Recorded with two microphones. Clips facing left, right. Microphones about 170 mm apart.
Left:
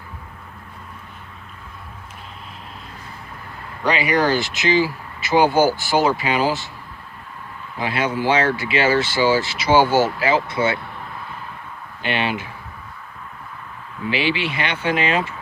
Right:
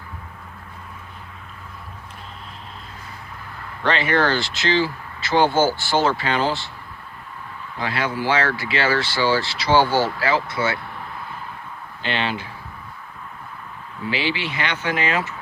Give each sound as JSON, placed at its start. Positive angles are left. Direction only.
{"t": 3.8, "sound": "speech", "side_deg": 10}
{"t": 7.8, "sound": "speech", "side_deg": 20}
{"t": 12.0, "sound": "speech", "side_deg": 15}
{"t": 14.0, "sound": "speech", "side_deg": 20}